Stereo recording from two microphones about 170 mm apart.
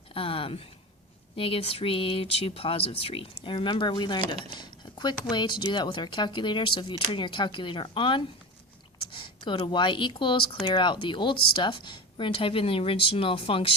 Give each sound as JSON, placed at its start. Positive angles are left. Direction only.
{"t": 0.1, "sound": "speech", "side_deg": 30}
{"t": 4.4, "sound": "a sound", "side_deg": 25}
{"t": 5.3, "sound": "speech", "side_deg": 25}